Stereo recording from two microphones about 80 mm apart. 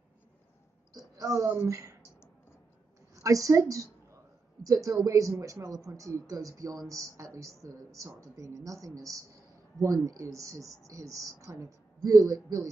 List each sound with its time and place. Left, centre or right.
1.1 s speech: right
3.2 s a woman's voice: right